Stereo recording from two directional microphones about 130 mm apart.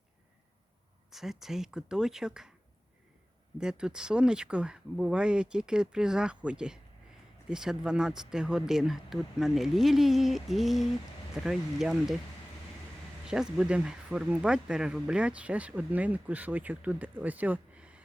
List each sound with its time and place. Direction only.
1.1 s speech: centre (ahead or behind)
3.6 s speech: 5° right (ahead or behind)
13.2 s speech: 5° right (ahead or behind)